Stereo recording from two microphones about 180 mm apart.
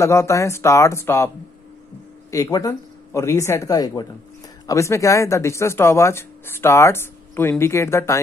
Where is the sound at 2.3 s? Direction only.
20° left (ahead or behind).